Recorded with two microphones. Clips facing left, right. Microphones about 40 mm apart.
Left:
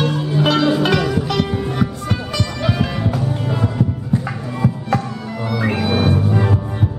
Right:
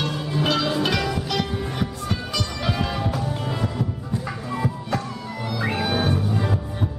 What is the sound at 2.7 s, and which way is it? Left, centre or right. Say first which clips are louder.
Music: left 5 dB; centre.